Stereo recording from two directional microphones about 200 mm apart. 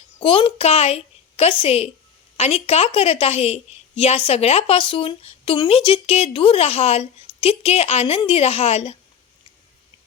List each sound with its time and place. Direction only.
0.2 s a woman's voice: 25° left (ahead or behind)